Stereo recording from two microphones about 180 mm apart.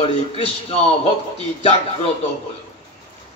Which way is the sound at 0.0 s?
30° left (ahead or behind).